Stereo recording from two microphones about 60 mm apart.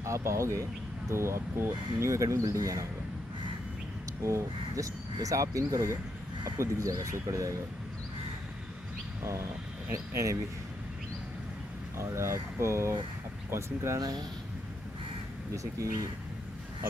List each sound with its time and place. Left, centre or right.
0.0 s speech: right
4.2 s speech: right
9.2 s speech: right
12.0 s speech: right
15.5 s speech: right